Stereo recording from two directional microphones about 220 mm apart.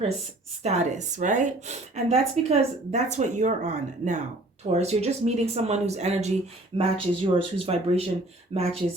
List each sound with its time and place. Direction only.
0.6 s speech: 30° right (ahead or behind)